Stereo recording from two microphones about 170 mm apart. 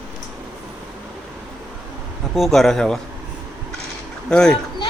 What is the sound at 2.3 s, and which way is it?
Speech, centre (ahead or behind).